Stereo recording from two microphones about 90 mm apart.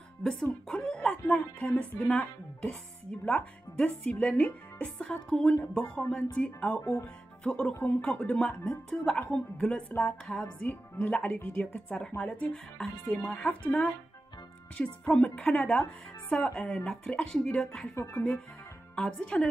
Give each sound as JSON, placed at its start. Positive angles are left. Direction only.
{"t": 0.2, "sound": "speech", "side_deg": 10}
{"t": 6.8, "sound": "speech", "side_deg": 30}
{"t": 7.4, "sound": "speech", "side_deg": 10}
{"t": 14.8, "sound": "speech", "side_deg": 10}
{"t": 18.9, "sound": "speech", "side_deg": 10}